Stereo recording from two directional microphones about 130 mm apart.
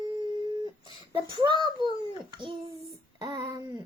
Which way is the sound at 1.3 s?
35° right (ahead or behind).